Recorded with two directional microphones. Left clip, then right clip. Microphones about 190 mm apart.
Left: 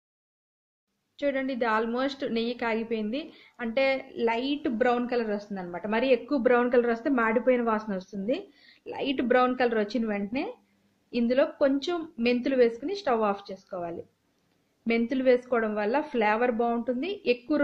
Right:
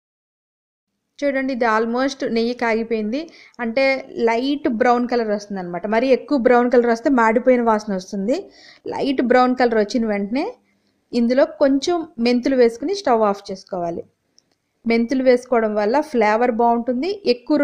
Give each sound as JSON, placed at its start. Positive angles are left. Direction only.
{"t": 1.1, "sound": "a woman's voice", "side_deg": -50}